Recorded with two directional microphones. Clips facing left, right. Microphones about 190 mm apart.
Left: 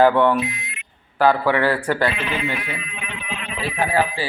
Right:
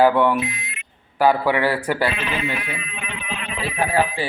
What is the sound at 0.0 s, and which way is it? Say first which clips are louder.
A man's voice: left 1 dB; 10° right (ahead or behind).